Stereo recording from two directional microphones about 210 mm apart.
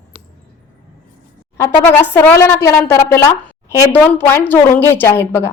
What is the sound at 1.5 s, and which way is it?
A woman's voice, 10° left (ahead or behind).